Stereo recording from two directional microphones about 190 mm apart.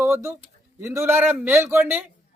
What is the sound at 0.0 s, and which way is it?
A man's voice, 15° right (ahead or behind).